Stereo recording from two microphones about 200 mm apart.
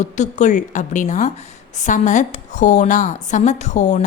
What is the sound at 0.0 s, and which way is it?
A woman's voice, 35° left (ahead or behind).